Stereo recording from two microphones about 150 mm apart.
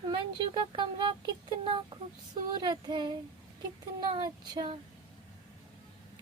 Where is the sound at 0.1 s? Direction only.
30° right (ahead or behind).